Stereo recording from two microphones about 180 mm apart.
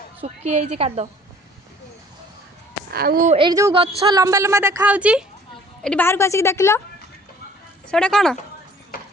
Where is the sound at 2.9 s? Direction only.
55° right (ahead or behind).